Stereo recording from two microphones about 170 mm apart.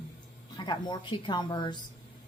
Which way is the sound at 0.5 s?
25° left (ahead or behind).